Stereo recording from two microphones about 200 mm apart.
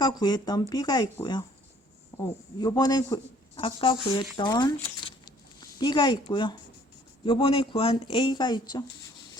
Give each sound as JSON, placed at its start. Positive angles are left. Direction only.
{"t": 0.0, "sound": "speech", "side_deg": 20}